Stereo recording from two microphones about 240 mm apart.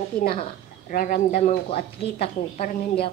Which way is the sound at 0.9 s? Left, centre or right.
Left.